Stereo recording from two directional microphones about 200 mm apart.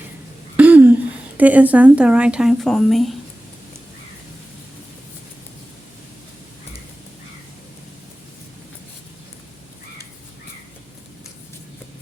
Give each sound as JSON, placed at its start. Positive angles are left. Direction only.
{"t": 0.5, "sound": "a woman's voice", "side_deg": -5}